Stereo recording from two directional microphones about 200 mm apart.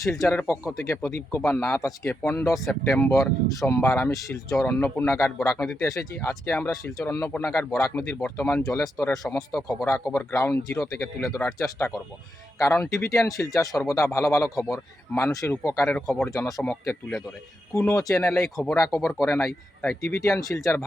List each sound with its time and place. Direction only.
0.0 s speech: 15° left (ahead or behind)
16.3 s speech: 15° left (ahead or behind)
18.5 s speech: 5° left (ahead or behind)